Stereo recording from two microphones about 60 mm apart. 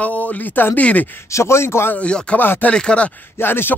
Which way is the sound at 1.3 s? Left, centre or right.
Left.